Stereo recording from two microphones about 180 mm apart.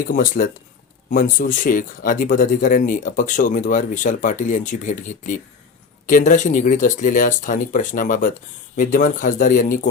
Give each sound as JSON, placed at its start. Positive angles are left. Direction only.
{"t": 0.1, "sound": "speech", "side_deg": 50}